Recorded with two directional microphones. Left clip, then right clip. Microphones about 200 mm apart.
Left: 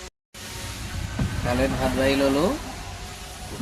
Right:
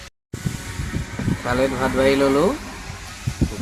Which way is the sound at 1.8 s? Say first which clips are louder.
Right 5 dB; 10° right (ahead or behind).